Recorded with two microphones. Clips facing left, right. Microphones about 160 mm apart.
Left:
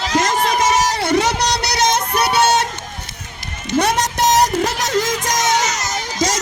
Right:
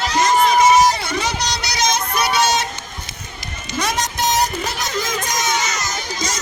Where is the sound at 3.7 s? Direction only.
65° left (ahead or behind); by 5.7 s 85° left.